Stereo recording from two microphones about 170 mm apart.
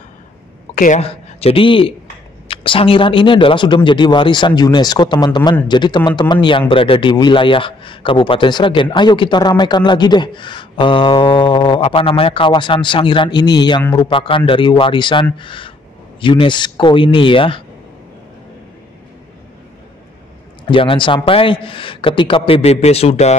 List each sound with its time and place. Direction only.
0.7 s a woman's voice: 50° left (ahead or behind)
1.0 s a man's voice: 35° left (ahead or behind)
20.6 s a man's voice: 30° left (ahead or behind)